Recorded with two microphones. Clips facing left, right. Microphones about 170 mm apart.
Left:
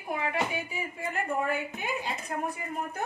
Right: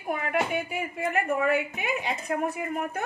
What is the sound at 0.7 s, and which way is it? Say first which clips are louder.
A woman's voice: right 6 dB; 65° right (ahead or behind).